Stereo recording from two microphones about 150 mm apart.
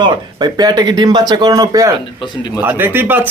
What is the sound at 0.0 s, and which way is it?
Speech, 30° right (ahead or behind).